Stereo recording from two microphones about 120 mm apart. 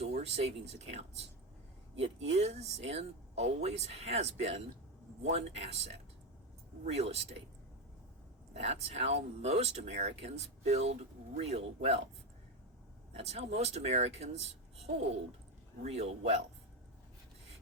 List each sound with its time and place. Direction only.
0.0 s speech: 60° right (ahead or behind)
8.5 s speech: 60° right (ahead or behind)
13.1 s speech: 60° right (ahead or behind)
15.8 s speech: 65° right (ahead or behind)